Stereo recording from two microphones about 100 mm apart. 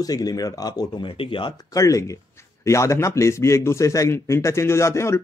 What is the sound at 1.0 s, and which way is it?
Speech, 60° left (ahead or behind).